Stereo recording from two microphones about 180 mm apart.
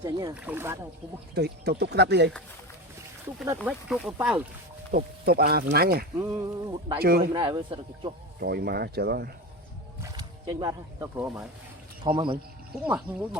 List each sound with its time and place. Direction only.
0.0 s speech: 20° right (ahead or behind)
1.4 s speech: 65° right (ahead or behind)
3.4 s speech: 15° right (ahead or behind)
3.7 s speech: 5° right (ahead or behind)
4.9 s speech: 60° right (ahead or behind)
6.1 s speech: 10° right (ahead or behind)
6.7 s speech: 25° right (ahead or behind)
8.4 s speech: 65° right (ahead or behind)
10.0 s speech: 20° right (ahead or behind)
12.7 s speech: 10° right (ahead or behind)